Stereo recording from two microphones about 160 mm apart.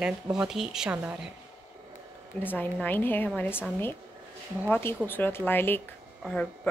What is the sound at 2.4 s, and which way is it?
Speech, 10° left (ahead or behind).